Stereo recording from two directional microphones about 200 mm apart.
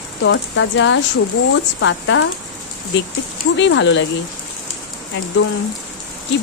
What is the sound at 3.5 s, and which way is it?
Speech, 65° left (ahead or behind).